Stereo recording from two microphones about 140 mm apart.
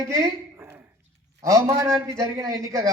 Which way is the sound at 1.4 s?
25° right (ahead or behind).